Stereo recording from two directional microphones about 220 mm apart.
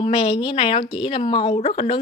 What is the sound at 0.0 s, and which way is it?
Speech, 25° left (ahead or behind).